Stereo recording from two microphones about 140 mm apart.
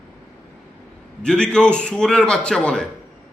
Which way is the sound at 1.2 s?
5° left (ahead or behind).